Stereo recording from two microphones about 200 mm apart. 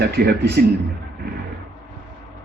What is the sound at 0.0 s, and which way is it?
Speech, 50° right (ahead or behind).